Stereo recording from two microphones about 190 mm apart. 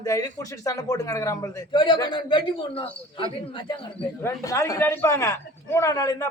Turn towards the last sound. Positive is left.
turn(degrees=20)  # may be behind; listen again after turning